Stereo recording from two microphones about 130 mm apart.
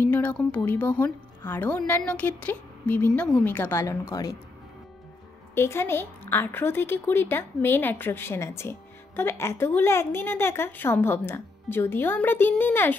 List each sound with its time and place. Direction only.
0.0 s a woman's voice: 10° left (ahead or behind)
4.1 s speech: 25° left (ahead or behind)
5.5 s a woman's voice: 20° left (ahead or behind)